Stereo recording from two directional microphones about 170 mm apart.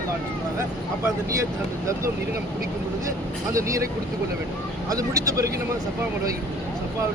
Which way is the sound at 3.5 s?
20° right (ahead or behind).